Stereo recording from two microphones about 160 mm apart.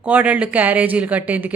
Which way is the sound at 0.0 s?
10° right (ahead or behind).